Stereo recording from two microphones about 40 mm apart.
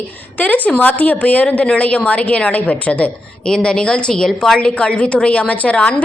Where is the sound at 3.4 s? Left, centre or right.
Centre.